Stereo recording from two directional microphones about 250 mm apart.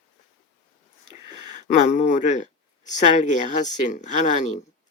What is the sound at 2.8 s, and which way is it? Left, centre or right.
Speech, left.